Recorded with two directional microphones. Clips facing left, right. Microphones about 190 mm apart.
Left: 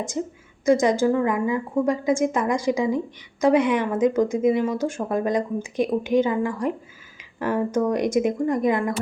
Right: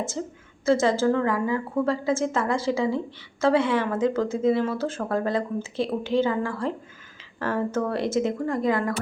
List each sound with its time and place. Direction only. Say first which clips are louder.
0.2 s speech: left 4 dB; 15° left (ahead or behind)